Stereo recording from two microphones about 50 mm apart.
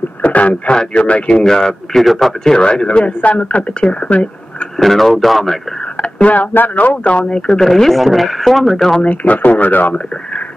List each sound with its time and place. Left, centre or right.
0.2 s a sound: left
0.7 s speech: left
1.4 s a man's voice: centre
2.5 s speech: centre
4.7 s speech: centre
5.9 s speech: left
7.2 s speech: centre
9.0 s speech: left